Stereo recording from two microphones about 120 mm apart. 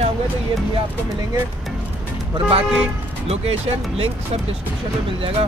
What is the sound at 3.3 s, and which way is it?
Speech, 60° right (ahead or behind).